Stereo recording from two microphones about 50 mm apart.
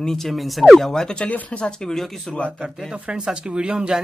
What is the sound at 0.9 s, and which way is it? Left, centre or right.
Speech, centre.